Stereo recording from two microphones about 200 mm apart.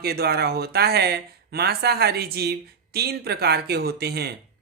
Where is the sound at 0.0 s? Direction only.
50° right (ahead or behind).